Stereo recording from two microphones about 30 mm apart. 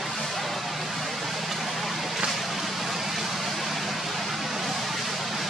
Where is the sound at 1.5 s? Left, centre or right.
Centre.